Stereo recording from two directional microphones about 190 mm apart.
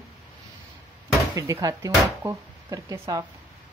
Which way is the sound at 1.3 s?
20° right (ahead or behind).